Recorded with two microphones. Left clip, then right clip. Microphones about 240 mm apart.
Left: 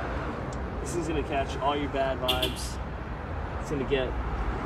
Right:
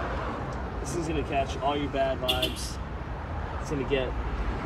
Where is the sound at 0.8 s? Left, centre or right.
Centre.